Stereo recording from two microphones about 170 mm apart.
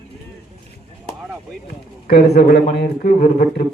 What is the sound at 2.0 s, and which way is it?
Speech, 70° left (ahead or behind).